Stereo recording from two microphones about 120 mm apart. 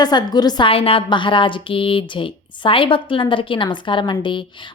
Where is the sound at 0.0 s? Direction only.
35° left (ahead or behind).